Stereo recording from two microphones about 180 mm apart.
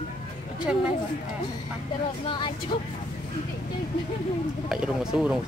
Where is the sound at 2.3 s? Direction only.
25° left (ahead or behind).